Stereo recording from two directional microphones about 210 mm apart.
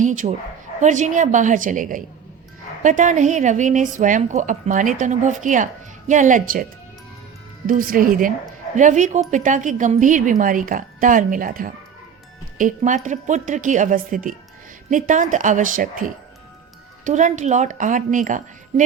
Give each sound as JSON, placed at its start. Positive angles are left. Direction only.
{"t": 0.0, "sound": "a woman's voice", "side_deg": -35}
{"t": 7.7, "sound": "a woman's voice", "side_deg": -40}